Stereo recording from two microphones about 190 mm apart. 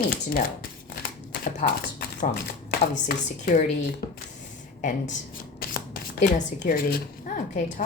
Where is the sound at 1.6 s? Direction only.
35° left (ahead or behind).